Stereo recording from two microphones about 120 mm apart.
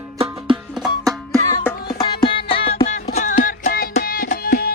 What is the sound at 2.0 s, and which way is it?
Music, 35° left (ahead or behind).